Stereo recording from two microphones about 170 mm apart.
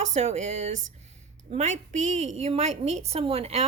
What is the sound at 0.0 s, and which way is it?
Speech, 40° right (ahead or behind).